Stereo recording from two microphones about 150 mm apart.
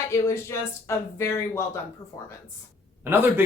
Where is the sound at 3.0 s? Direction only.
15° right (ahead or behind).